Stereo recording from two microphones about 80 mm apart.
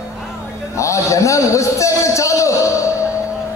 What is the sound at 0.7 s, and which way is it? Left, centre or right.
A man's voice, left.